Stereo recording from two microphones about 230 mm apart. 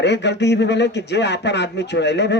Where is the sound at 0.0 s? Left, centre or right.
Left.